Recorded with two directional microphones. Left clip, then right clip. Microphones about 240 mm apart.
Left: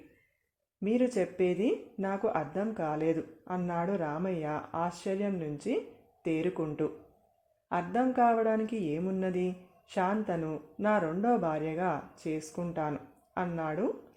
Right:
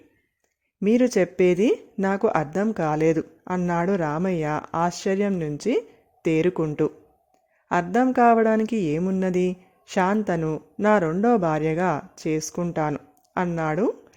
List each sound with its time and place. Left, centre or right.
0.8 s speech: right